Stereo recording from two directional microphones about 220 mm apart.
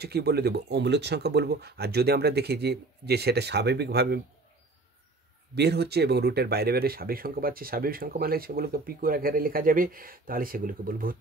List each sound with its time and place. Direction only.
0.0 s speech: 45° right (ahead or behind)
5.5 s speech: 50° right (ahead or behind)